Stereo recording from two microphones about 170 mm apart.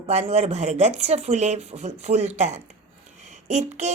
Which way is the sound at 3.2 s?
45° right (ahead or behind).